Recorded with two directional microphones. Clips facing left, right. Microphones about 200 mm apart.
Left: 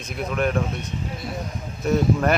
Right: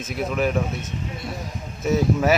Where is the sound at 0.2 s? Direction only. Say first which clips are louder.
Right 1 dB; 5° right (ahead or behind).